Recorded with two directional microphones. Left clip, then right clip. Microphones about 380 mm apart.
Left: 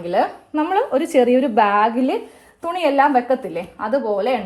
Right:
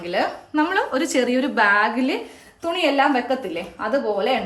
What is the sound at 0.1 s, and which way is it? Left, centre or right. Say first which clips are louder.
Speech: left 3 dB; centre.